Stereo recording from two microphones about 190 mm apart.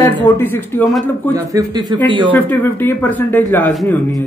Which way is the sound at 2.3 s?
10° left (ahead or behind).